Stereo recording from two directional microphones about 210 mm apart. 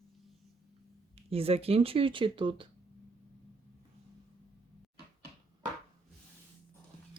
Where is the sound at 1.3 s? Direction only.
25° right (ahead or behind).